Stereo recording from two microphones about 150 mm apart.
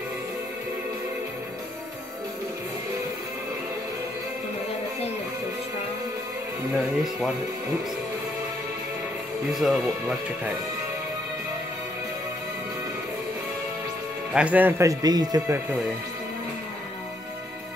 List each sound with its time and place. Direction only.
6.7 s speech: 5° right (ahead or behind)
9.5 s speech: centre (ahead or behind)
14.3 s speech: 10° right (ahead or behind)